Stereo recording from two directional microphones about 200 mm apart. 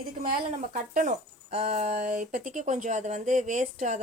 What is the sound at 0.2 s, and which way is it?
Speech, 40° right (ahead or behind).